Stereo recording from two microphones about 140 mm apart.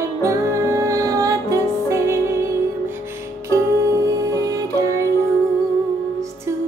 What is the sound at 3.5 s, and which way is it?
Music, 20° right (ahead or behind).